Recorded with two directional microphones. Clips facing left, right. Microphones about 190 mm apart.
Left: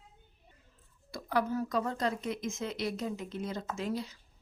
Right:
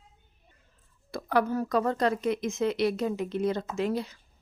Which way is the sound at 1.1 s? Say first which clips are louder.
Right 5 dB; 65° right (ahead or behind).